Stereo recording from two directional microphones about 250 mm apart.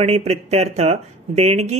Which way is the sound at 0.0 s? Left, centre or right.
Right.